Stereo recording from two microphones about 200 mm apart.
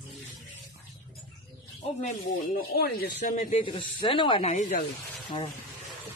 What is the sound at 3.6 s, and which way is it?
Speech, 25° left (ahead or behind).